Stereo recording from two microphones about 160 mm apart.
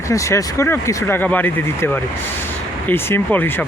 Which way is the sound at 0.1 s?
20° left (ahead or behind).